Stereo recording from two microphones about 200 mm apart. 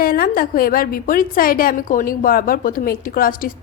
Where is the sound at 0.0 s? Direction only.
45° left (ahead or behind).